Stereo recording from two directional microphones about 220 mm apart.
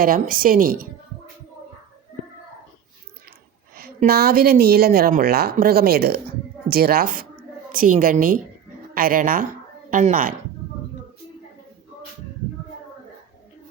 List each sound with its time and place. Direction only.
0.0 s a woman's voice: 40° right (ahead or behind)
3.8 s a woman's voice: 45° right (ahead or behind)